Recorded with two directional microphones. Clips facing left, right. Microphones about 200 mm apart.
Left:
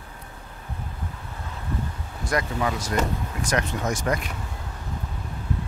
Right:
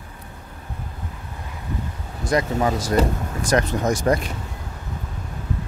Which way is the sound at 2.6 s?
35° right (ahead or behind).